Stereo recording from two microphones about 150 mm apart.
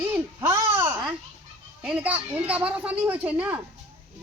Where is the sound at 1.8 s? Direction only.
10° right (ahead or behind).